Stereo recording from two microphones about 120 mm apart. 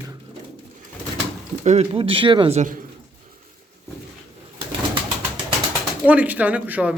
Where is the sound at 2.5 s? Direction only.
85° right.